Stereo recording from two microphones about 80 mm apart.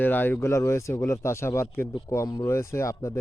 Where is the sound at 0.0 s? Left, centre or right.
Left.